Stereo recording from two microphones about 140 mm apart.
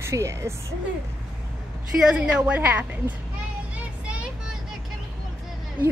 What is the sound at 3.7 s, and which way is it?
Vehicle, 10° right (ahead or behind).